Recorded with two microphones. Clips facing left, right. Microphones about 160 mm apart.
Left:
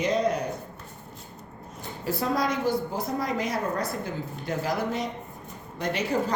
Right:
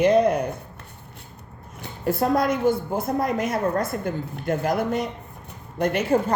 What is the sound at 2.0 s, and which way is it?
A man's voice, 55° right (ahead or behind).